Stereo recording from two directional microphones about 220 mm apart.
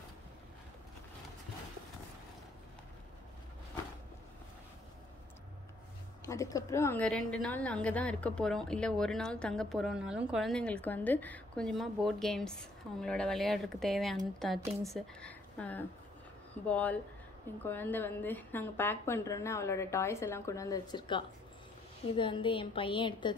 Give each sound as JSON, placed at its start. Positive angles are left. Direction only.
{"t": 6.2, "sound": "a woman's voice", "side_deg": 15}